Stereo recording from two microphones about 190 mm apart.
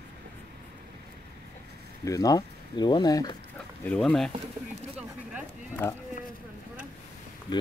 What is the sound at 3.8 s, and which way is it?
Speech, 5° left (ahead or behind).